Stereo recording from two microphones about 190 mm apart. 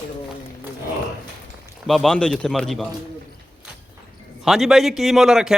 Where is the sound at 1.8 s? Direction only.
Centre (ahead or behind).